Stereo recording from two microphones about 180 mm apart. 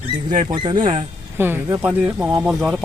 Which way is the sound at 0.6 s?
25° right (ahead or behind).